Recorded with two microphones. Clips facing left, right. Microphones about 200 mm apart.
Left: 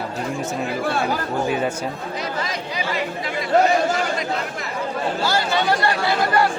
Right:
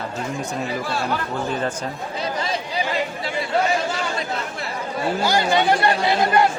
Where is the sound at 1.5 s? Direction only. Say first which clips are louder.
Left 2 dB; 10° left (ahead or behind).